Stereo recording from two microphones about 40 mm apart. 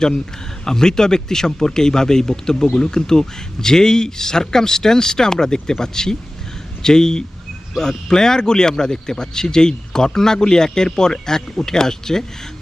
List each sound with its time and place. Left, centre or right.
0.6 s speech: centre